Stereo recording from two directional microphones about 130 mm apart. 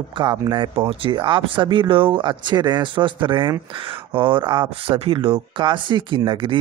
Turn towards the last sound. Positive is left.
turn(degrees=-40)  # may be behind; listen again after turning